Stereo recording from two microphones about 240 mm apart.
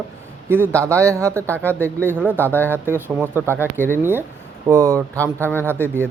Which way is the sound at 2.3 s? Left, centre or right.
Centre.